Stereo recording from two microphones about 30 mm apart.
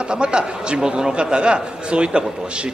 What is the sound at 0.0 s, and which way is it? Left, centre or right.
A man's voice, right.